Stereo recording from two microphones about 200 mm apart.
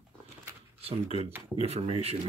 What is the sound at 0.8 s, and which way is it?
Speech, 30° right (ahead or behind).